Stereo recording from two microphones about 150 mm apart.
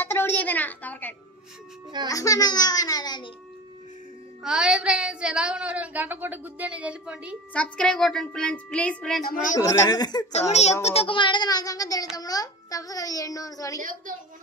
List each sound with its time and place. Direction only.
0.0 s a woman's voice: 15° left (ahead or behind)
2.0 s a child's voice: 25° left (ahead or behind)
4.4 s a woman's voice: 5° right (ahead or behind)
7.5 s a woman's voice: 5° left (ahead or behind)
9.2 s a woman's voice: 70° left (ahead or behind)
9.6 s a child's voice: 25° left (ahead or behind)
10.3 s a child's voice: 45° left (ahead or behind); by 13.7 s 25° left (ahead or behind)